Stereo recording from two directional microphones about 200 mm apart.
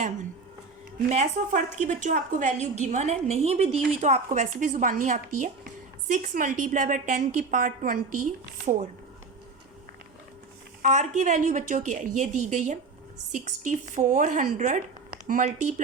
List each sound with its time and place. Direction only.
1.1 s a woman's voice: 35° right (ahead or behind)
10.8 s a woman's voice: 40° right (ahead or behind)